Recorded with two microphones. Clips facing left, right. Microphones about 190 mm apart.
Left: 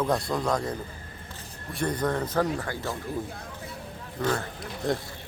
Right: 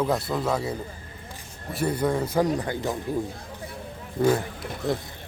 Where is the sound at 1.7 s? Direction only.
10° right (ahead or behind).